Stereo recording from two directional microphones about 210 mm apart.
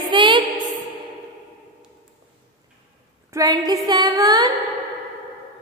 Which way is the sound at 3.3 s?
15° right (ahead or behind).